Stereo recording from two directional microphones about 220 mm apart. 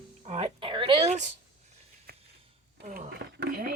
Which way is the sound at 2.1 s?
45° right (ahead or behind).